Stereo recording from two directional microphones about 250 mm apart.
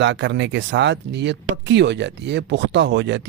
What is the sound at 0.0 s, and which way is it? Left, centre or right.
A man's voice, right.